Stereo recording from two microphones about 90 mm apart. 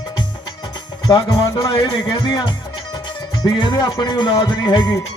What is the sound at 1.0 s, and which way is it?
Music, 45° left (ahead or behind).